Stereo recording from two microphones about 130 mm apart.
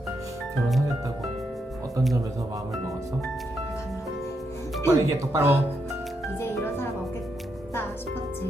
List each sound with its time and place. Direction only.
4.9 s speech: 20° right (ahead or behind)